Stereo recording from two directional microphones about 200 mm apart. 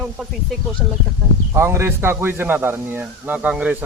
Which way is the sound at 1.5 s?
15° right (ahead or behind).